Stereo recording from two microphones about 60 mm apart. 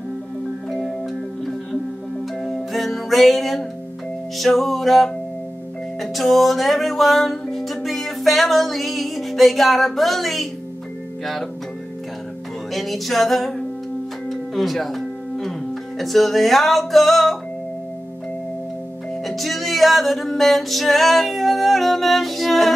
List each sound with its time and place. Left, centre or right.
0.7 s music: centre
12.7 s music: centre
19.2 s music: centre